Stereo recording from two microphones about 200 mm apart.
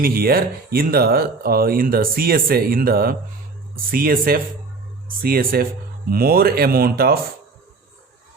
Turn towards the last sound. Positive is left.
turn(degrees=-50)  # may be behind; listen again after turning